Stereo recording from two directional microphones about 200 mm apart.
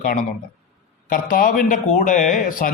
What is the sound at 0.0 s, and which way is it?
Speech, 45° left (ahead or behind).